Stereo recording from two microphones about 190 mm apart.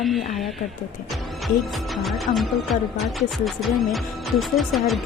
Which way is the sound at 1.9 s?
Centre (ahead or behind).